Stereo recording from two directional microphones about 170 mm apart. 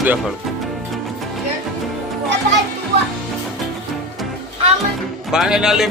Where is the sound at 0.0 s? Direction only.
10° right (ahead or behind).